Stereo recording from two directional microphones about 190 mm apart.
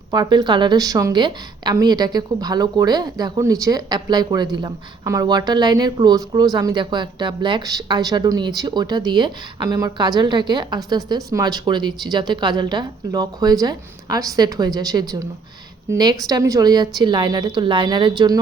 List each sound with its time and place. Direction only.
0.1 s speech: 20° right (ahead or behind)